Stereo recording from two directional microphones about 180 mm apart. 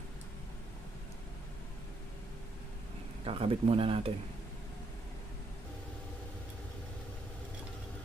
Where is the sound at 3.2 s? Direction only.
30° right (ahead or behind).